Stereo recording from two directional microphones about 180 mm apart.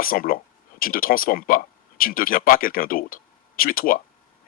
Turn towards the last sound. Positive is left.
turn(degrees=55)  # may be behind; listen again after turning